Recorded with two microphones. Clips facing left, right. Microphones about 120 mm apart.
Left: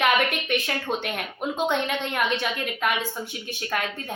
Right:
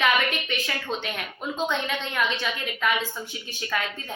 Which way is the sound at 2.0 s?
50° left (ahead or behind).